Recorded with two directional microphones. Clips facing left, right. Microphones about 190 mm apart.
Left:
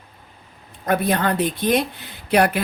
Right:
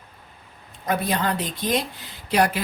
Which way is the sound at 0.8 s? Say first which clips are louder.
Left 4 dB; 60° left (ahead or behind).